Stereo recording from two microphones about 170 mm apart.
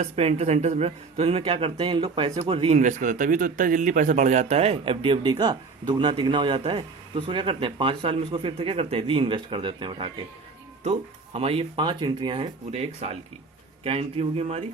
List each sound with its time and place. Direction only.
0.0 s speech: 40° right (ahead or behind)
11.3 s speech: 35° right (ahead or behind)